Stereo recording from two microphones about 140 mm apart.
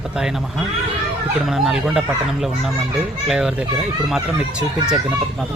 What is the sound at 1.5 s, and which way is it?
A child's voice, centre (ahead or behind).